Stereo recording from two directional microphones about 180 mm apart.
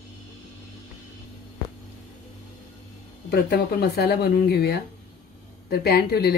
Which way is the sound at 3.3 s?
65° left (ahead or behind).